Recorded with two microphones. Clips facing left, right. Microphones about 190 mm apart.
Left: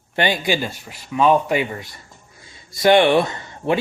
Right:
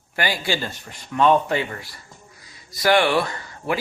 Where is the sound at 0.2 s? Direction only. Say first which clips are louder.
Left 4 dB; 20° left (ahead or behind).